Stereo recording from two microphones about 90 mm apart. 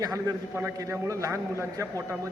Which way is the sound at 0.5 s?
30° right (ahead or behind).